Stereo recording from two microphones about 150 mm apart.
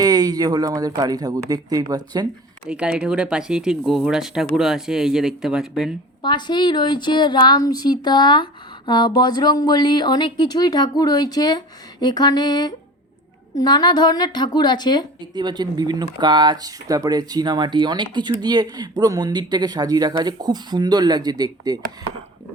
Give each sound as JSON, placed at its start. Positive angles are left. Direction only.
{"t": 0.0, "sound": "speech", "side_deg": -25}
{"t": 2.6, "sound": "speech", "side_deg": -5}
{"t": 6.2, "sound": "a woman's voice", "side_deg": 30}
{"t": 15.4, "sound": "speech", "side_deg": -30}